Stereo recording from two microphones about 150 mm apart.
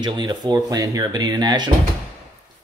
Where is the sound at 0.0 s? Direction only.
30° right (ahead or behind).